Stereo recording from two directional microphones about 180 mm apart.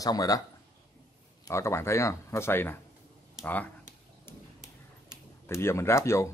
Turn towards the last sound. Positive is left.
turn(degrees=15)  # may be behind; listen again after turning